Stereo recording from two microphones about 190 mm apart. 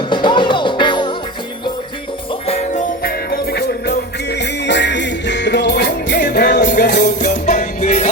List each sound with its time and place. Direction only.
0.1 s music: 25° left (ahead or behind)
2.5 s music: 35° left (ahead or behind)
3.0 s music: 55° left (ahead or behind)
6.9 s music: 40° left (ahead or behind)